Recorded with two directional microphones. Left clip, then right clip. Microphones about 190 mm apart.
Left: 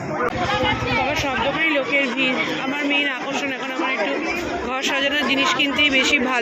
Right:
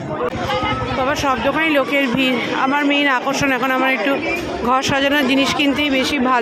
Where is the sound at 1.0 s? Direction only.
30° right (ahead or behind).